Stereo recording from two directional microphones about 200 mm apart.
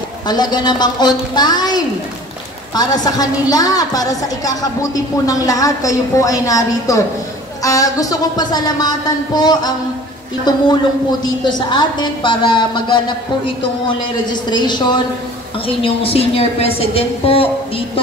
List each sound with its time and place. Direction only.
0.3 s a woman's voice: 20° left (ahead or behind)